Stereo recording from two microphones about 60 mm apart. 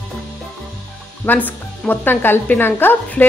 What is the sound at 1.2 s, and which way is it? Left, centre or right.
Speech, left.